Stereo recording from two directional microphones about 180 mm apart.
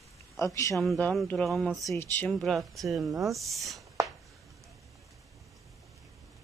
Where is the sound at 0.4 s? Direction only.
15° left (ahead or behind).